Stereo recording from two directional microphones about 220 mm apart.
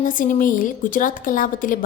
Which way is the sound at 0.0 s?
40° left (ahead or behind).